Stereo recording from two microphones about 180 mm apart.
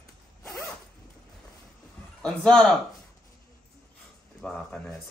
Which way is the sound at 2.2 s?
5° left (ahead or behind).